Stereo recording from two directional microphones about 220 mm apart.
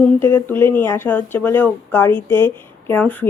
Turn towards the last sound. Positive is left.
turn(degrees=10)  # may be behind; listen again after turning